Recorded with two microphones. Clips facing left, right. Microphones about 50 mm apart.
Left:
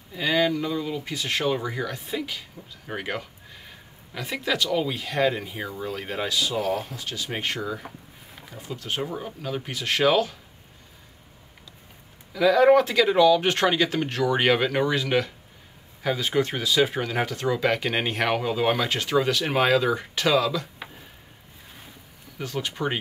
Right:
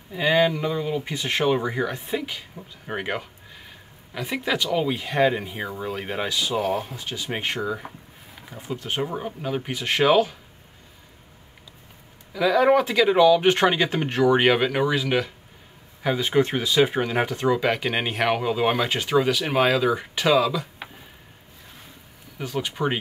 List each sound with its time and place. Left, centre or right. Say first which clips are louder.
0.1 s speech: right 3 dB; centre
3.6 s sniff: even; centre
4.3 s speech: right 1 dB; centre
12.3 s speech: left 1 dB; centre
22.4 s speech: right 2 dB; centre